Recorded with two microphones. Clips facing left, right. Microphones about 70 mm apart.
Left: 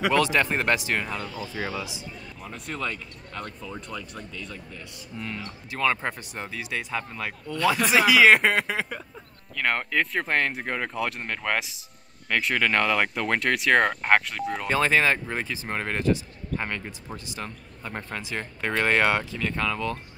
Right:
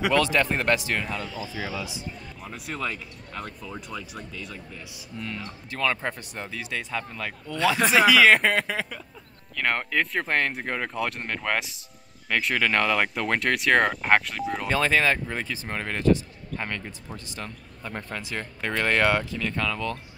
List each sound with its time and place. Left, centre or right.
0.1 s speech: centre
1.2 s speech: left
2.4 s speech: centre
5.7 s speech: centre
7.5 s speech: right
8.1 s speech: centre
9.6 s speech: centre
14.7 s speech: left
17.8 s speech: left